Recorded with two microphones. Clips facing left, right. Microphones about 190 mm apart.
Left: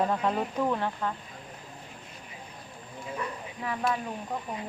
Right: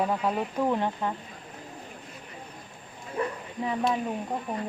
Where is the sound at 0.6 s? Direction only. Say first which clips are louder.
Right 2 dB; 20° right (ahead or behind).